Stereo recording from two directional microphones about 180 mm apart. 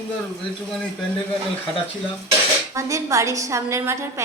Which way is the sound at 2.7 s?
15° right (ahead or behind).